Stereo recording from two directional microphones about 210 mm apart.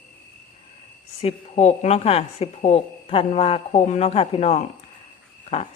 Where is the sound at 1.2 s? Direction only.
30° left (ahead or behind).